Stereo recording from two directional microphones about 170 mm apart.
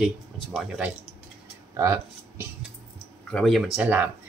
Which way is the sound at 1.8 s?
20° right (ahead or behind).